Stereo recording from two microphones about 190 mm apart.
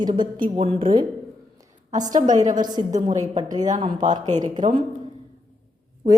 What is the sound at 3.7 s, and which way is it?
Speech, 40° right (ahead or behind).